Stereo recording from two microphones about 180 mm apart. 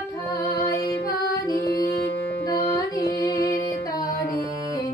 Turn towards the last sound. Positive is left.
turn(degrees=20)  # may be behind; listen again after turning